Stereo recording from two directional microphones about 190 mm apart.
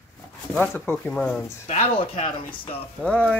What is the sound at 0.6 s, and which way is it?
Speech, 10° left (ahead or behind).